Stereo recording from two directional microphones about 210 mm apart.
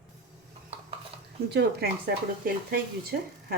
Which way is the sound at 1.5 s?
55° right (ahead or behind).